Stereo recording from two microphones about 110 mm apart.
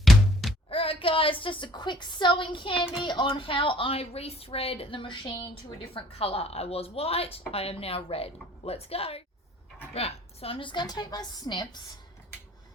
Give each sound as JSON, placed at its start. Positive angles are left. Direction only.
{"t": 0.0, "sound": "music", "side_deg": 0}
{"t": 0.7, "sound": "a woman's voice", "side_deg": 55}
{"t": 5.9, "sound": "a woman's voice", "side_deg": 60}